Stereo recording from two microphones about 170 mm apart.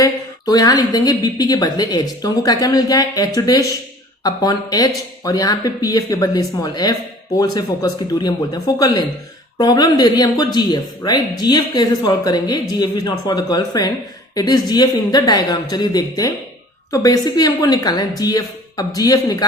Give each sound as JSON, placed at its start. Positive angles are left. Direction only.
{"t": 0.0, "sound": "speech", "side_deg": 20}